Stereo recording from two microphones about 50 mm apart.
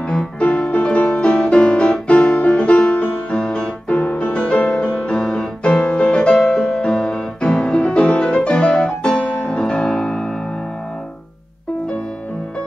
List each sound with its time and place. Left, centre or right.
0.7 s music: left
3.3 s music: centre
3.9 s music: left; by 5.5 s centre
5.6 s music: left
6.3 s music: centre